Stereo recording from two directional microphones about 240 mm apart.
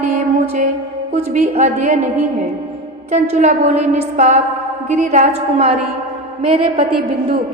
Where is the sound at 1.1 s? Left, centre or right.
Right.